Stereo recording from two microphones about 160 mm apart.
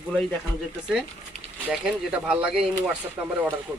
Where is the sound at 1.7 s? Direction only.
5° right (ahead or behind).